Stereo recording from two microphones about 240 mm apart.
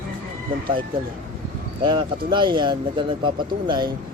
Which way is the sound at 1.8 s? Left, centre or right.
Centre.